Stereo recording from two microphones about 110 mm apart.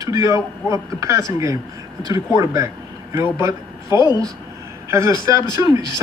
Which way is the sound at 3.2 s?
30° right (ahead or behind).